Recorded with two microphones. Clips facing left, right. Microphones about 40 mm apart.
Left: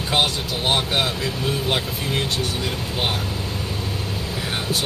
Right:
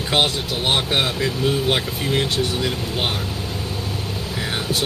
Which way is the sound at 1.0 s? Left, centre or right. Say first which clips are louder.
Right 3 dB; centre.